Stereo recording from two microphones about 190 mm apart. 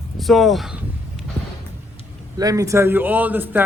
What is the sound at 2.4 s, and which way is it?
Speech, 20° right (ahead or behind).